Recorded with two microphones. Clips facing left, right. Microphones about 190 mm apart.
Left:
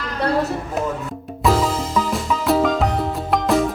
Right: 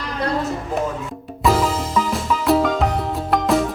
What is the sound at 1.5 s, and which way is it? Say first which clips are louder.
Music: even; centre (ahead or behind).